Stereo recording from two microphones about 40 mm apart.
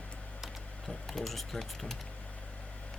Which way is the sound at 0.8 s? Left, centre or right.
Centre.